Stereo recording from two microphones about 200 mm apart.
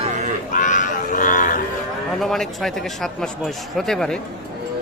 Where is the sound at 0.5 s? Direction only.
40° left (ahead or behind).